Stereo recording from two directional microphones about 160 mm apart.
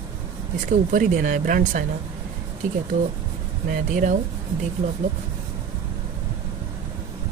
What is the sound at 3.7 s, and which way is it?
Speech, 55° right (ahead or behind).